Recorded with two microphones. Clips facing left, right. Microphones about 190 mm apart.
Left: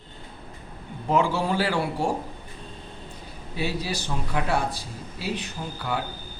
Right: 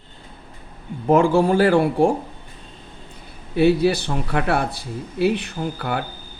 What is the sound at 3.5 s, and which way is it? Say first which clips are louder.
Speech: right 13 dB; 60° right (ahead or behind).